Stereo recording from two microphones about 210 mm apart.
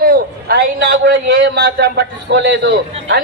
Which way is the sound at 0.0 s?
45° right (ahead or behind).